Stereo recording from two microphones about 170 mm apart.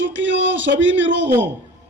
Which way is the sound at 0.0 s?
90° right.